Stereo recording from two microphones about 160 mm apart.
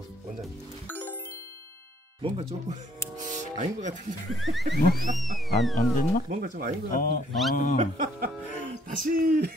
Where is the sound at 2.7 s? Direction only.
50° right (ahead or behind).